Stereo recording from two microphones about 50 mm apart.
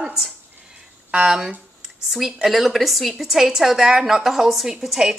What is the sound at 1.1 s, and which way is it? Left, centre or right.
A woman's voice, centre.